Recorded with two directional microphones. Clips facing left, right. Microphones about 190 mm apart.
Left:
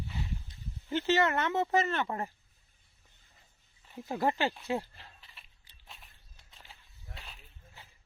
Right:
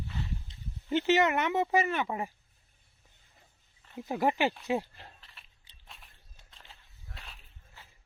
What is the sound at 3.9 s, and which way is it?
Speech, 15° right (ahead or behind).